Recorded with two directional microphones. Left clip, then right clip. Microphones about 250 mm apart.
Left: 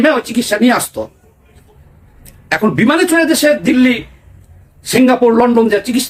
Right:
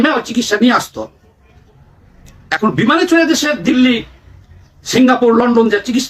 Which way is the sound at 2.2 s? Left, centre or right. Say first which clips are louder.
Left 1 dB; centre.